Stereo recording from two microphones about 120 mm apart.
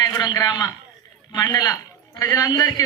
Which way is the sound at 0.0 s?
35° left (ahead or behind).